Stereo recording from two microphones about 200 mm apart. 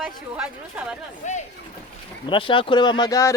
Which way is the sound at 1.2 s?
35° left (ahead or behind).